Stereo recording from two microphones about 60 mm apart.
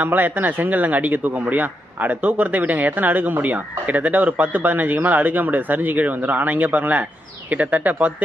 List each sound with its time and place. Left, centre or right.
0.0 s speech: right